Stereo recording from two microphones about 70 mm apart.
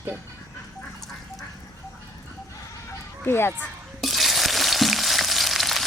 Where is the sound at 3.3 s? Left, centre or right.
Left.